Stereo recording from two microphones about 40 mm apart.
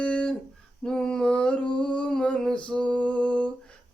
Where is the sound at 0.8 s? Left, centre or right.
Centre.